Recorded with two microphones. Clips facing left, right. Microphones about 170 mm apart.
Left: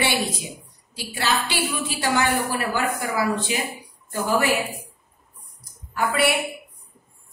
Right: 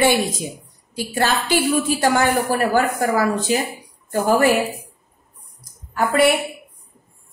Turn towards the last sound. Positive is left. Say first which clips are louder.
# right 5 dB
turn(degrees=-45)  # may be behind; listen again after turning